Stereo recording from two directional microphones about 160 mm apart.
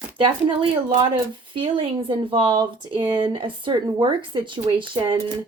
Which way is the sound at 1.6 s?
35° right (ahead or behind).